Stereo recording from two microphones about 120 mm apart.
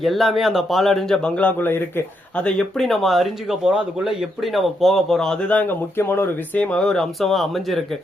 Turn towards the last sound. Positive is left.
turn(degrees=0)  # may be behind; listen again after turning